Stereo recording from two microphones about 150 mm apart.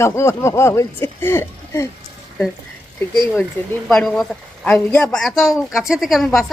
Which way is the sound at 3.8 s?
5° left (ahead or behind).